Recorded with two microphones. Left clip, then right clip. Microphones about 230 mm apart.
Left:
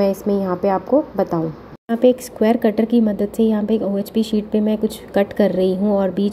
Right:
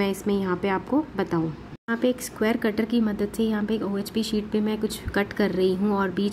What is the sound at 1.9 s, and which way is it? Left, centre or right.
A woman's voice, centre.